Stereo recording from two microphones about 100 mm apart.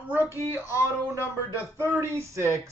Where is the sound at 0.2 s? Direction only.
30° left (ahead or behind).